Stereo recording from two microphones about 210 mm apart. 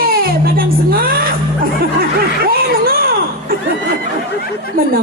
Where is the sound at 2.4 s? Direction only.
45° right (ahead or behind).